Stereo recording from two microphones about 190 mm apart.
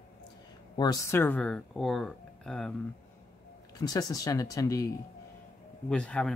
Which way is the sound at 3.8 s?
20° left (ahead or behind).